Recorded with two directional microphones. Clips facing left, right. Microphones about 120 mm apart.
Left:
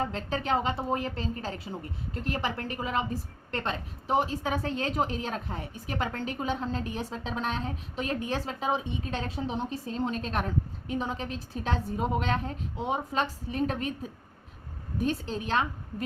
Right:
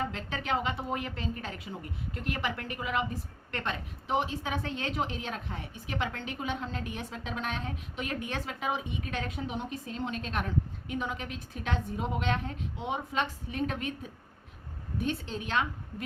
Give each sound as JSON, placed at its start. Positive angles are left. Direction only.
{"t": 0.0, "sound": "a woman's voice", "side_deg": 35}
{"t": 14.9, "sound": "a woman's voice", "side_deg": 40}